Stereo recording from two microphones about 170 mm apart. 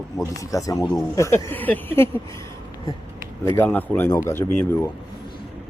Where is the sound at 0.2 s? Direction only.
20° left (ahead or behind).